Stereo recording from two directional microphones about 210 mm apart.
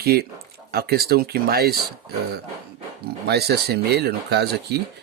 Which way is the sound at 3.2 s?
50° right (ahead or behind).